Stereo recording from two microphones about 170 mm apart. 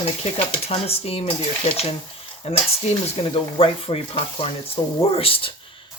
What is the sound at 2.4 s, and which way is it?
Speech, 35° left (ahead or behind).